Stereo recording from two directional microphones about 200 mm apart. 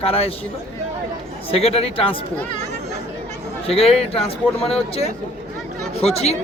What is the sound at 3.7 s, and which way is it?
Speech, 30° left (ahead or behind).